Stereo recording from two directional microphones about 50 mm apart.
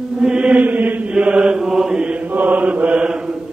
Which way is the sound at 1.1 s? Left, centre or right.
Right.